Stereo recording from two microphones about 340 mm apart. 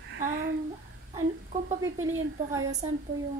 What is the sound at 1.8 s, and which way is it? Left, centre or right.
Speech, right.